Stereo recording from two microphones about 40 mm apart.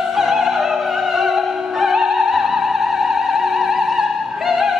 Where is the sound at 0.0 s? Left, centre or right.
Centre.